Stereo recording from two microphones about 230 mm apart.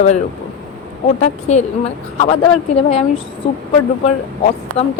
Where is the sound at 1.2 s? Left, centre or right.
Left.